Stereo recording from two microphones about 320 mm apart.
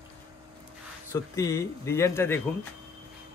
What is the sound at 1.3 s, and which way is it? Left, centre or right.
A man's voice, centre.